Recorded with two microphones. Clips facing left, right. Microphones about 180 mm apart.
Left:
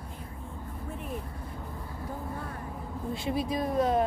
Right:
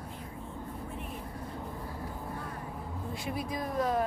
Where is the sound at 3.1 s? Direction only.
25° left (ahead or behind).